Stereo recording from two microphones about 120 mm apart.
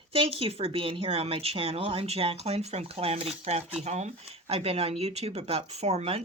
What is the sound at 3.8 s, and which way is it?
Speech, 75° right (ahead or behind).